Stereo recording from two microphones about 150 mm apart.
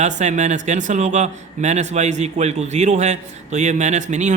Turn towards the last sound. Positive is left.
turn(degrees=-50)  # may be behind; listen again after turning